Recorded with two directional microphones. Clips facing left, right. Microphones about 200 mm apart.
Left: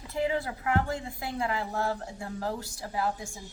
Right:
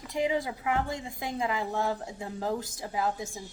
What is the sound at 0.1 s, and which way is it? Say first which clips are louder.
Speech: right 1 dB; 15° right (ahead or behind).